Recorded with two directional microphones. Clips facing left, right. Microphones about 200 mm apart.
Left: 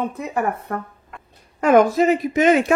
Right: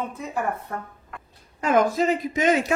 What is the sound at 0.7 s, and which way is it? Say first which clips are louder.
Speech: left 5 dB; 60° left (ahead or behind).